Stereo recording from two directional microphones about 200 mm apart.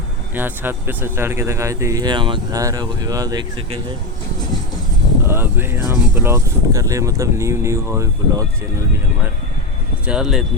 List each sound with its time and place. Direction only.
0.3 s speech: 10° right (ahead or behind)
5.3 s speech: 10° right (ahead or behind)
10.1 s speech: 5° right (ahead or behind)